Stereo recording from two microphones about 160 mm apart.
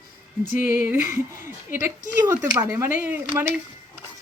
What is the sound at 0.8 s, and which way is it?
Speech, 15° right (ahead or behind).